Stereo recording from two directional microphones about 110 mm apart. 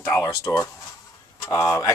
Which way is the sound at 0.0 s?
30° left (ahead or behind).